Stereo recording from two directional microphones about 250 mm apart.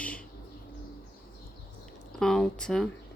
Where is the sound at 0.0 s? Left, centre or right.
Centre.